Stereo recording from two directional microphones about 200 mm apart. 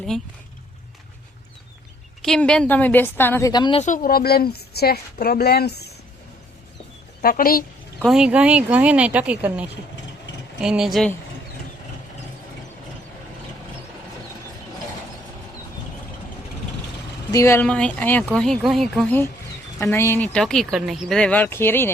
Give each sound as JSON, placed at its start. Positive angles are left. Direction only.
{"t": 2.2, "sound": "speech", "side_deg": 5}
{"t": 3.8, "sound": "a woman's voice", "side_deg": 45}
{"t": 7.2, "sound": "a woman's voice", "side_deg": 45}
{"t": 8.0, "sound": "speech", "side_deg": -5}
{"t": 17.3, "sound": "speech", "side_deg": 15}